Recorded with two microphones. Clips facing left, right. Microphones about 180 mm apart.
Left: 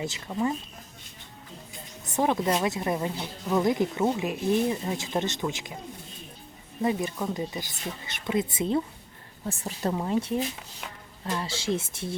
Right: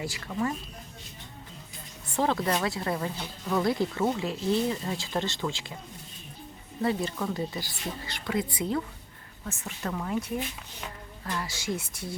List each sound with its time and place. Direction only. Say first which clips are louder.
0.0 s speech: left 2 dB; 20° left (ahead or behind)
2.1 s speech: left 2 dB; 15° left (ahead or behind)
6.8 s speech: left 1 dB; 15° left (ahead or behind)
9.4 s speech: left 5 dB; 35° left (ahead or behind)